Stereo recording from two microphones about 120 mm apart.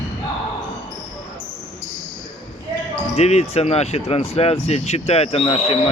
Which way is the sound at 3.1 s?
60° left (ahead or behind).